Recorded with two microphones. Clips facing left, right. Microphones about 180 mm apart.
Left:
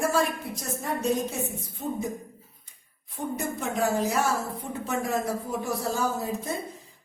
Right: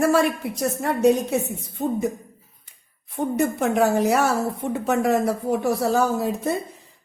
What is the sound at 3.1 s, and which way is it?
A woman's voice, 65° right (ahead or behind).